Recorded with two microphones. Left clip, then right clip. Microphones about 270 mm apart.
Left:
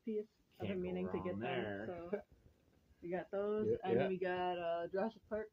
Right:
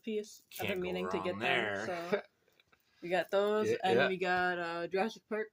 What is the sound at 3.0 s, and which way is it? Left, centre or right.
Speech, right.